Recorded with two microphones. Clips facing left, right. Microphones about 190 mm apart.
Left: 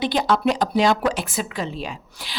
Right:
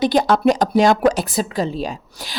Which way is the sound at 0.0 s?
45° right (ahead or behind).